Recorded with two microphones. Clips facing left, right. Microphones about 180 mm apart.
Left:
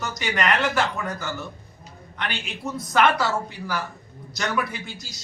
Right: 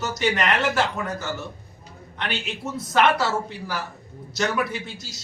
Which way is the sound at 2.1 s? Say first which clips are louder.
Right 2 dB; 25° right (ahead or behind).